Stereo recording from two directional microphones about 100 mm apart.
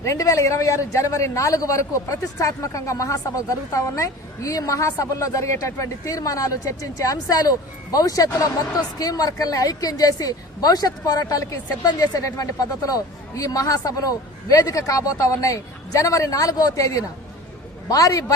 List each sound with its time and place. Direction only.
0.0 s a woman's voice: 30° left (ahead or behind)